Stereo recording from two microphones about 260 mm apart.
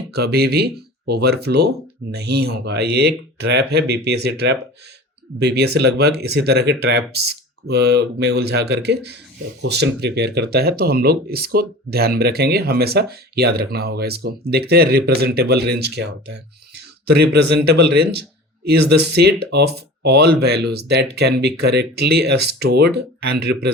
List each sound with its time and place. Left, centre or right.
0.1 s speech: right
16.7 s a sound: right
17.7 s speech: right